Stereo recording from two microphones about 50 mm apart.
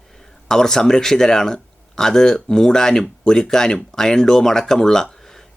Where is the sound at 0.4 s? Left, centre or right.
Centre.